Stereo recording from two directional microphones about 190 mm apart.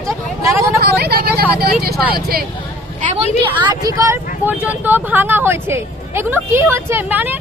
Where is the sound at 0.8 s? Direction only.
55° right (ahead or behind).